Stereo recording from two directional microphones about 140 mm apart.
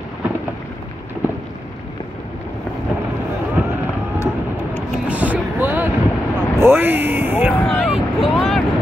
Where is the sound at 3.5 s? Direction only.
15° right (ahead or behind).